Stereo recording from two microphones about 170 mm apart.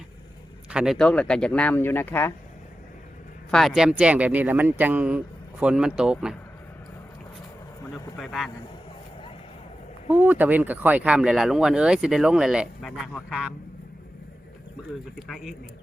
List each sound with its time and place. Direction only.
0.7 s speech: 5° right (ahead or behind); by 2.3 s 10° left (ahead or behind)
3.5 s speech: centre (ahead or behind)
7.8 s speech: 15° left (ahead or behind)
8.2 s speech: centre (ahead or behind)
10.1 s speech: 10° right (ahead or behind)
15.1 s speech: centre (ahead or behind)